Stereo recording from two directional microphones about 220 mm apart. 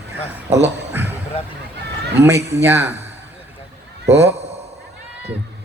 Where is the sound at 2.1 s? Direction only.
10° right (ahead or behind).